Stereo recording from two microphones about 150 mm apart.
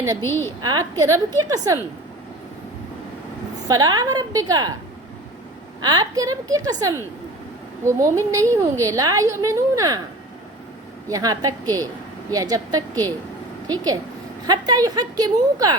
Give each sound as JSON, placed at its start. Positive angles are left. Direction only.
{"t": 0.2, "sound": "a woman's voice", "side_deg": 15}
{"t": 0.6, "sound": "a woman's voice", "side_deg": -25}
{"t": 3.7, "sound": "a woman's voice", "side_deg": -25}
{"t": 5.8, "sound": "a woman's voice", "side_deg": -25}
{"t": 11.1, "sound": "a woman's voice", "side_deg": -25}